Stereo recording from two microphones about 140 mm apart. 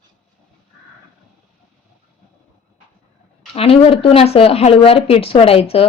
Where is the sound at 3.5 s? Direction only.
45° left (ahead or behind).